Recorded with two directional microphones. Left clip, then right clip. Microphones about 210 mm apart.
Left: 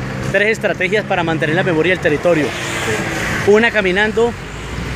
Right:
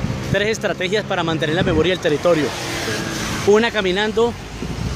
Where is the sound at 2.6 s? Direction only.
45° right (ahead or behind).